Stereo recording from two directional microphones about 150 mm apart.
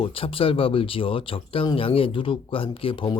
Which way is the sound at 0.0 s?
35° left (ahead or behind).